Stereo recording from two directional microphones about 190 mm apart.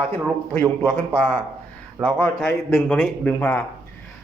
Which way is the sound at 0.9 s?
10° left (ahead or behind).